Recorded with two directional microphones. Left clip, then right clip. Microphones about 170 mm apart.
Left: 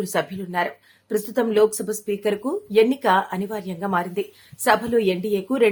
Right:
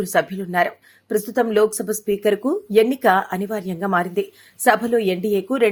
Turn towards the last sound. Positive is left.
turn(degrees=-25)  # may be behind; listen again after turning